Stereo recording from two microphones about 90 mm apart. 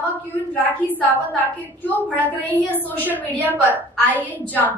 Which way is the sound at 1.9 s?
20° left (ahead or behind).